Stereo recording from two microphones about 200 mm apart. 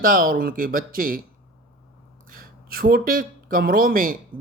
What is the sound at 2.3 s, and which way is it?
Speech, 50° right (ahead or behind).